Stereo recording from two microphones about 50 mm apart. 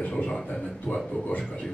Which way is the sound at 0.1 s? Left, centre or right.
Centre.